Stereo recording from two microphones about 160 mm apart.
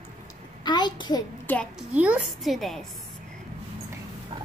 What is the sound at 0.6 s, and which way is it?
Speech, 30° left (ahead or behind).